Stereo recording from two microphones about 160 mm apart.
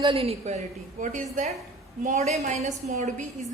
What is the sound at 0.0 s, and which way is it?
A woman's voice, 35° right (ahead or behind).